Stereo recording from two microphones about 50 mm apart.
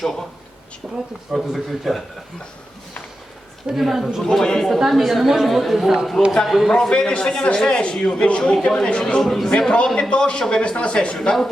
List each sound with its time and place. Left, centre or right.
0.0 s a woman's voice: centre
1.3 s a woman's voice: centre
3.8 s a woman's voice: centre
4.2 s a man's voice: centre
4.7 s a woman's voice: centre
6.7 s a man's voice: centre
9.2 s a woman's voice: centre
9.5 s a man's voice: centre